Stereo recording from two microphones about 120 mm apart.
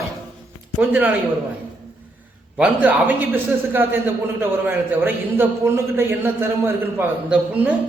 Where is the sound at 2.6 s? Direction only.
15° right (ahead or behind).